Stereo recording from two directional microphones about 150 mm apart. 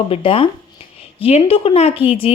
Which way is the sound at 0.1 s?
40° left (ahead or behind).